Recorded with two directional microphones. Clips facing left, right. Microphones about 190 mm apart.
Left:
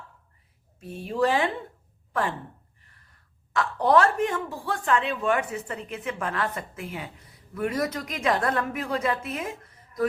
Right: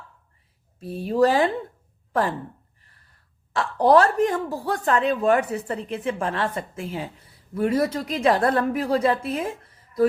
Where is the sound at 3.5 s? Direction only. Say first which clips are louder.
Right 4 dB; 35° right (ahead or behind).